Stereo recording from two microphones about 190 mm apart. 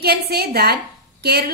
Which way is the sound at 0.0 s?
55° right (ahead or behind).